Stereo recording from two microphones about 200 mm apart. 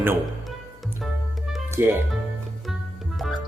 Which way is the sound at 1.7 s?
10° right (ahead or behind).